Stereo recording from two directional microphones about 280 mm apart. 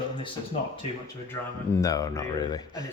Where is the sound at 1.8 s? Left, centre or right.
Centre.